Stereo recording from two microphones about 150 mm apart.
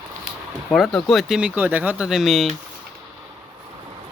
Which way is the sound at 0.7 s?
Centre (ahead or behind).